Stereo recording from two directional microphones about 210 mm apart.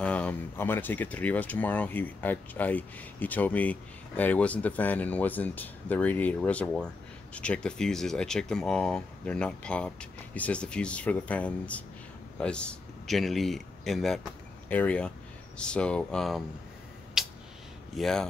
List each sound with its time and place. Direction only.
0.0 s speech: 5° left (ahead or behind)
17.2 s a sound: centre (ahead or behind)
17.9 s speech: centre (ahead or behind)